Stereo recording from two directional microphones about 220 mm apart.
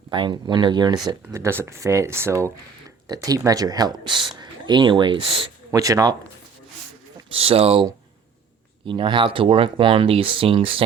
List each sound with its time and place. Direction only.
0.1 s speech: 20° right (ahead or behind)
7.3 s speech: 25° right (ahead or behind)